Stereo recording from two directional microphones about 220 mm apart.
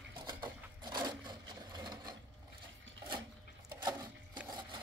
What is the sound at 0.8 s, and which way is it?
Wood, 20° right (ahead or behind).